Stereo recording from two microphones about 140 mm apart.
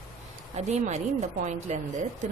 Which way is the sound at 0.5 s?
55° right (ahead or behind).